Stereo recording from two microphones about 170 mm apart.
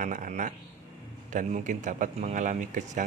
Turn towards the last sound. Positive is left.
turn(degrees=-45)  # may be behind; listen again after turning